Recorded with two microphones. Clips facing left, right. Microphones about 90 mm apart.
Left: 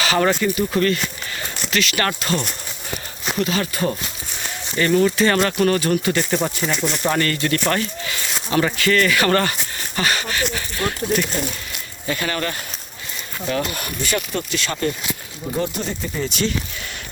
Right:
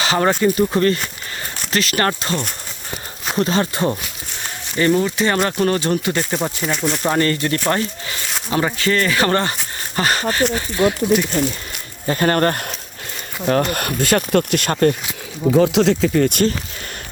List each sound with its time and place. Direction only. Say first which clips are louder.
0.0 s speech: right 2 dB; 25° right (ahead or behind)
6.3 s speech: even; 10° right (ahead or behind); by 10.6 s 35° right (ahead or behind)
10.8 s speech: right 6 dB; 15° right (ahead or behind)
12.0 s speech: right 7 dB; 45° right (ahead or behind)
15.7 s speech: right 12 dB; 90° right; by 16.6 s 50° right (ahead or behind)